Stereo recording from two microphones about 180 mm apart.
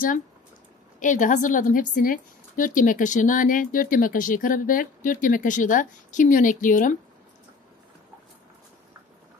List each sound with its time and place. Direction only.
0.9 s a woman's voice: 45° left (ahead or behind)